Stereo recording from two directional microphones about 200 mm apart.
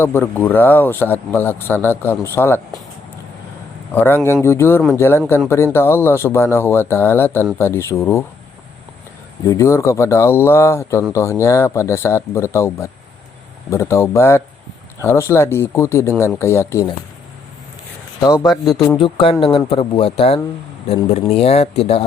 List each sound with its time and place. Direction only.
0.0 s speech: 10° left (ahead or behind)
3.9 s speech: 10° left (ahead or behind)
9.5 s speech: 15° left (ahead or behind)
18.2 s a man's voice: 15° left (ahead or behind); by 22.0 s 30° left (ahead or behind)